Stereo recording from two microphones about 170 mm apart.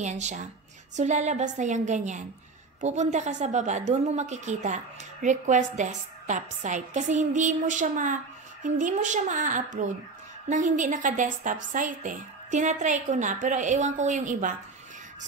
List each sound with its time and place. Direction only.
0.0 s a woman's voice: 45° right (ahead or behind)